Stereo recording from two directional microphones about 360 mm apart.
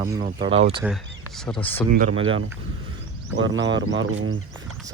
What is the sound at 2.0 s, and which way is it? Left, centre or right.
Speech, right.